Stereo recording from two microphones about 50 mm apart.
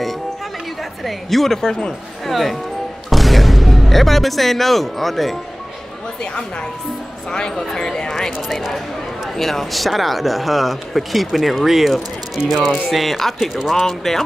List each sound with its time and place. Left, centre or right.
1.0 s speech: centre
2.2 s speech: centre
7.2 s speech: centre
9.4 s speech: centre